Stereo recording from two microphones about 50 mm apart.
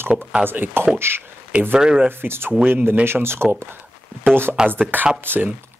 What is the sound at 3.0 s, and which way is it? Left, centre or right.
Speech, right.